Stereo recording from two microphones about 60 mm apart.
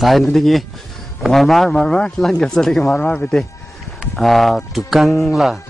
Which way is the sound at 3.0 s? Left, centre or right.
Left.